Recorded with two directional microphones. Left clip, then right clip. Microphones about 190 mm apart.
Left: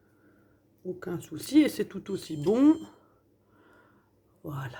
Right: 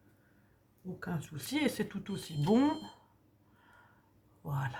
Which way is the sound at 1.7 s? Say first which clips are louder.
Left 6 dB; 50° left (ahead or behind).